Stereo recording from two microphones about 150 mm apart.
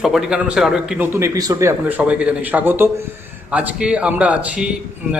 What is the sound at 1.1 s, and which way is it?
Speech, 20° right (ahead or behind).